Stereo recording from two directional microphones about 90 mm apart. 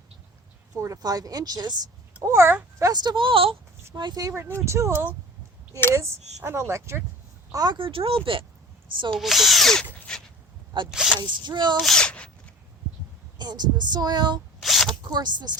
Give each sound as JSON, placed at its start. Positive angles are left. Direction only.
{"t": 0.8, "sound": "speech", "side_deg": -40}
{"t": 2.2, "sound": "speech", "side_deg": -30}
{"t": 2.9, "sound": "a woman's voice", "side_deg": -50}
{"t": 3.9, "sound": "speech", "side_deg": -50}
{"t": 7.5, "sound": "speech", "side_deg": -45}
{"t": 7.8, "sound": "a woman's voice", "side_deg": -80}
{"t": 9.1, "sound": "speech", "side_deg": 0}
{"t": 10.1, "sound": "a sound", "side_deg": 10}
{"t": 10.8, "sound": "speech", "side_deg": -5}
{"t": 11.2, "sound": "speech", "side_deg": -55}
{"t": 11.8, "sound": "a sound", "side_deg": 5}
{"t": 13.4, "sound": "speech", "side_deg": -50}
{"t": 14.6, "sound": "zipper", "side_deg": 0}
{"t": 15.0, "sound": "speech", "side_deg": -50}